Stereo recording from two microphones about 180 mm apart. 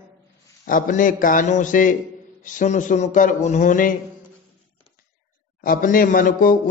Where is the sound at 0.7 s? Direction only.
50° left (ahead or behind).